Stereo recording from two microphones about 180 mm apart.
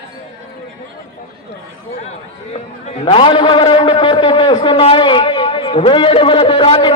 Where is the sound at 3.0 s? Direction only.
30° left (ahead or behind).